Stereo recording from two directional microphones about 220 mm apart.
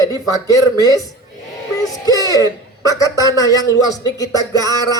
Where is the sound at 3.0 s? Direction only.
15° left (ahead or behind).